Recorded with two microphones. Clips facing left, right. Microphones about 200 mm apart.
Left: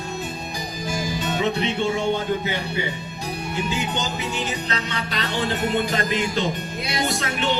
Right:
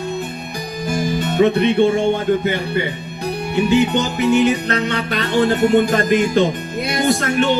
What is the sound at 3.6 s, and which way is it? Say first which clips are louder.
Music: right 12 dB; 65° right (ahead or behind).